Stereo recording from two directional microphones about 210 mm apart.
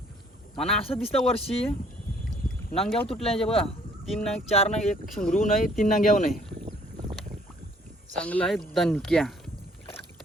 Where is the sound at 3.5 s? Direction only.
25° left (ahead or behind).